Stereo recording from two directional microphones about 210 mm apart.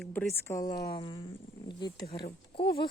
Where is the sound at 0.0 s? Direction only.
10° left (ahead or behind).